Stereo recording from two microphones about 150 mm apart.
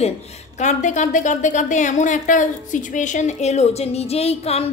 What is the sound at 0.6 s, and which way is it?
A woman's voice, 55° left (ahead or behind).